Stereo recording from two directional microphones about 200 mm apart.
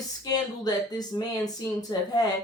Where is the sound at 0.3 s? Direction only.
20° left (ahead or behind).